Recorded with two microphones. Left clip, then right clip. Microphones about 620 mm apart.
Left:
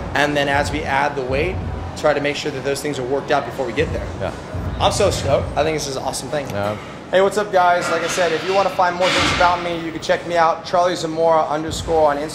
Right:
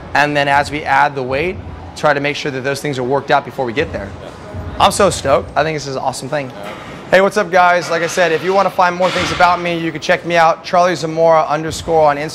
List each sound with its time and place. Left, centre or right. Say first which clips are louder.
0.1 s speech: right 5 dB; right
4.7 s speech: right 5 dB; right
5.6 s speech: right 3 dB; right
7.1 s a man's voice: right 5 dB; right